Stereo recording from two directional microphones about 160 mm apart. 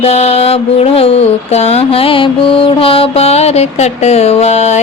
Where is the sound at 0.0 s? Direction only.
40° left (ahead or behind).